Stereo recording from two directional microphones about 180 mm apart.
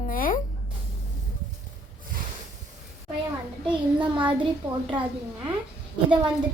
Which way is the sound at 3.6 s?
25° right (ahead or behind).